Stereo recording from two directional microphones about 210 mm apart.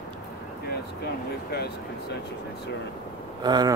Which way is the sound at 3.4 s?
20° right (ahead or behind).